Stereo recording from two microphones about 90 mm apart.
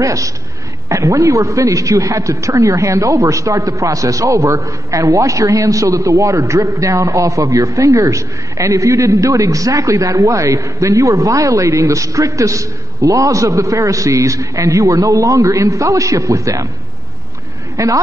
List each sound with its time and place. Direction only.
0.0 s a man's voice: 35° right (ahead or behind)
17.7 s a man's voice: 40° right (ahead or behind)